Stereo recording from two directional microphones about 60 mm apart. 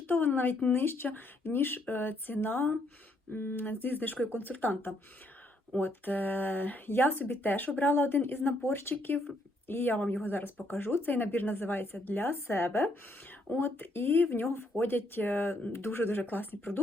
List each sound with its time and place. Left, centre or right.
0.1 s speech: left